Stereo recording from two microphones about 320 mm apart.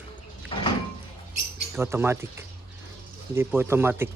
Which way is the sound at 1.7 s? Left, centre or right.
Centre.